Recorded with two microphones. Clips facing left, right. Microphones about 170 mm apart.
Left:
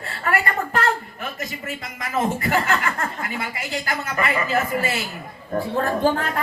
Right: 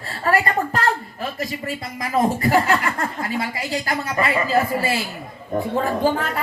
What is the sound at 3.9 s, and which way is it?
A woman's voice, 30° right (ahead or behind).